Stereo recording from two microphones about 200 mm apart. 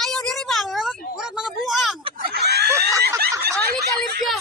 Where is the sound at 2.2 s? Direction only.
50° right (ahead or behind).